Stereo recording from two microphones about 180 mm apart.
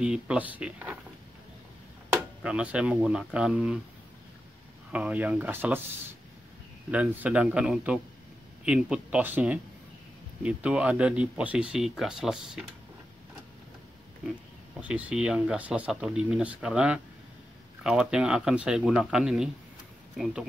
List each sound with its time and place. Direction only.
0.0 s speech: 5° right (ahead or behind)
2.1 s speech: 5° right (ahead or behind)
4.9 s speech: 10° right (ahead or behind)
6.9 s speech: 5° right (ahead or behind)
14.8 s speech: 10° right (ahead or behind)